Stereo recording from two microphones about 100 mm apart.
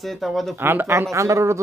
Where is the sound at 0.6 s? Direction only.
25° right (ahead or behind).